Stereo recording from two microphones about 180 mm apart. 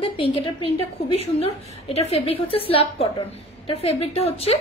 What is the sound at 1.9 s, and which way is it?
A woman's voice, 35° left (ahead or behind).